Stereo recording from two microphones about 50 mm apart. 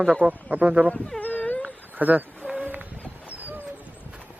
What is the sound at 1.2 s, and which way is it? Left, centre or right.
Wail, left.